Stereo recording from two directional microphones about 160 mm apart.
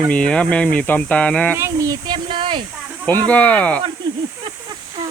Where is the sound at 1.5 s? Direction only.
20° right (ahead or behind).